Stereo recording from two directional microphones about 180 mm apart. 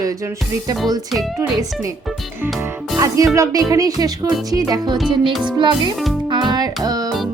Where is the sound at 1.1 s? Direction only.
Centre (ahead or behind).